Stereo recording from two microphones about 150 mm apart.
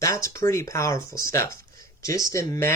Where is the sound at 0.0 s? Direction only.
20° left (ahead or behind).